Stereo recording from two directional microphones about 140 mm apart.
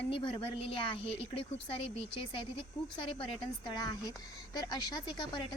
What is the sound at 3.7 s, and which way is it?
Speech, 30° left (ahead or behind).